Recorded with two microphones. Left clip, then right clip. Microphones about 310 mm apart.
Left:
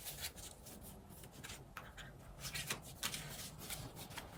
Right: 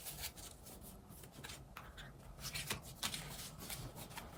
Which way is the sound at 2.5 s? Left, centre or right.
Centre.